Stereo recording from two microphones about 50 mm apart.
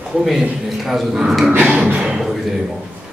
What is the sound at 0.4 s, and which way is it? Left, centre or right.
A man's voice, centre.